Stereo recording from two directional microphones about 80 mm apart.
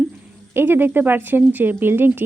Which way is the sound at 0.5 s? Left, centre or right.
Right.